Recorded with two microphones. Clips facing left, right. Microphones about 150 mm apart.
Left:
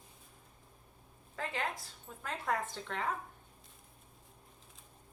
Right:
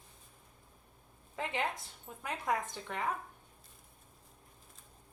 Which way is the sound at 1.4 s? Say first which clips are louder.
Right 2 dB; 20° right (ahead or behind).